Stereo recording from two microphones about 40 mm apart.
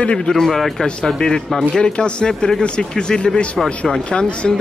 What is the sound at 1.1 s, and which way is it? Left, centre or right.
Speech, centre.